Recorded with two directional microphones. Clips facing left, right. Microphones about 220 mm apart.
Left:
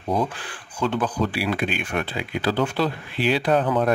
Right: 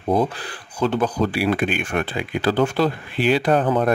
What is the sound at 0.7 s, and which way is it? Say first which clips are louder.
Speech: right 3 dB; 40° right (ahead or behind).